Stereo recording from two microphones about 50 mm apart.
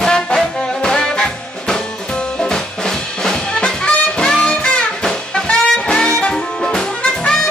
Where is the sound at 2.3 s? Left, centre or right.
Centre.